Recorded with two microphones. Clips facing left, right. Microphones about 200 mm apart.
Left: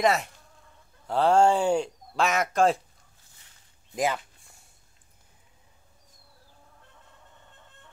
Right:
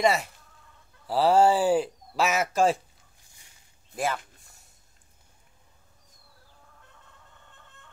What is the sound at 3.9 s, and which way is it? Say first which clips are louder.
Speech: left 2 dB; 15° left (ahead or behind).